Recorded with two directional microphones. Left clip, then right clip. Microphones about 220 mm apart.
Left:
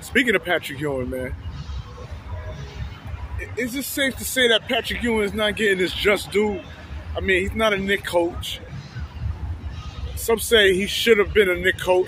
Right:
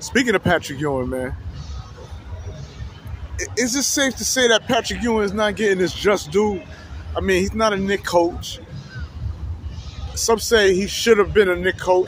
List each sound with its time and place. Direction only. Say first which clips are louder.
0.1 s speech: right 1 dB; 10° right (ahead or behind)
3.7 s speech: right 3 dB; 15° right (ahead or behind)
10.2 s speech: right 1 dB; 10° right (ahead or behind)